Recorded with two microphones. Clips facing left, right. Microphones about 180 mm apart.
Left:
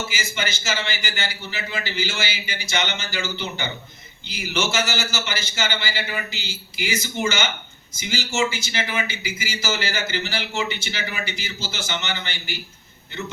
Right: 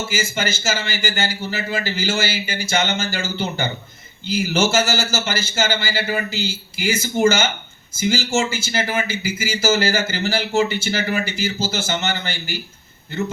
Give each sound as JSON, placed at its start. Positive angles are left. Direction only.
{"t": 0.1, "sound": "a man's voice", "side_deg": -50}